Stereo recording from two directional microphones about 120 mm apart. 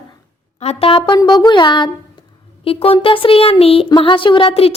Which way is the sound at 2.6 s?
50° left (ahead or behind).